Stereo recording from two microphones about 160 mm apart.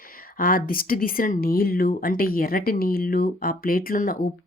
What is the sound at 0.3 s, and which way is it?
Speech, 60° left (ahead or behind).